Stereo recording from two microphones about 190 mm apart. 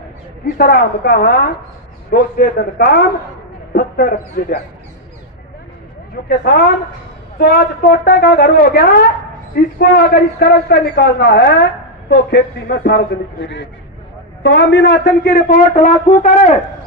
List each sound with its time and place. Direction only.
0.5 s a woman's voice: 55° left (ahead or behind)
6.2 s a woman's voice: 55° left (ahead or behind)